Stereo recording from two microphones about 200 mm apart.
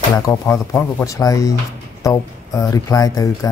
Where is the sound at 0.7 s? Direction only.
15° left (ahead or behind).